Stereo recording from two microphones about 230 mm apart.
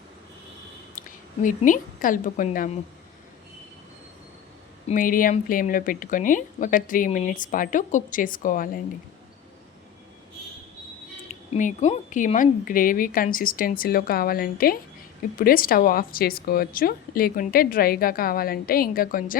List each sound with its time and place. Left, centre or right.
0.9 s a woman's voice: left
4.9 s speech: left
11.5 s speech: left